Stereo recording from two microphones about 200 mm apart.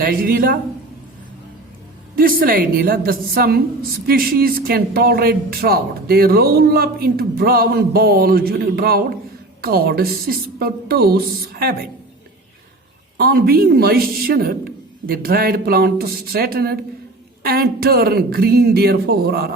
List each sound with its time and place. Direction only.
0.0 s speech: 45° right (ahead or behind)
2.1 s speech: 45° right (ahead or behind)
13.1 s speech: 50° right (ahead or behind)